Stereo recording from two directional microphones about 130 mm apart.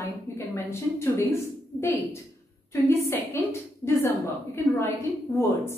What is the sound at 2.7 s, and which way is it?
Speech, 20° left (ahead or behind).